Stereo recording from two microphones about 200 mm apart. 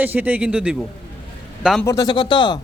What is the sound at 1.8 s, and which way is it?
Speech, 15° left (ahead or behind).